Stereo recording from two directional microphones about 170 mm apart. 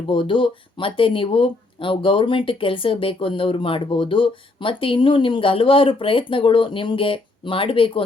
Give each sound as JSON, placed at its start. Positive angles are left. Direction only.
{"t": 0.1, "sound": "speech", "side_deg": 30}